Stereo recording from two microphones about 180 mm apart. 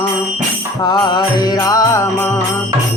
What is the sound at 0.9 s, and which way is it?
Music, 25° left (ahead or behind).